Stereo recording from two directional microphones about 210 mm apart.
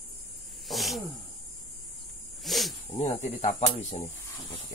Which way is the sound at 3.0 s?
35° left (ahead or behind).